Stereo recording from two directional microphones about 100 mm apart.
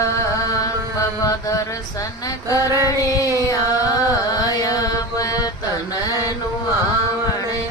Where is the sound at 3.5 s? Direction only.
35° left (ahead or behind).